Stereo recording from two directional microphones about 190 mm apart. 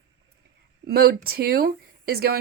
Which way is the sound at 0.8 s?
55° right (ahead or behind).